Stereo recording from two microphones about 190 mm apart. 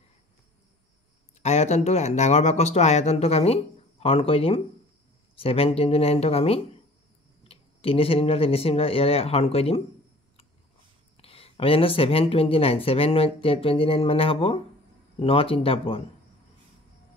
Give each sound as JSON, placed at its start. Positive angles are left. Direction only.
{"t": 1.4, "sound": "speech", "side_deg": 35}
{"t": 11.1, "sound": "speech", "side_deg": 30}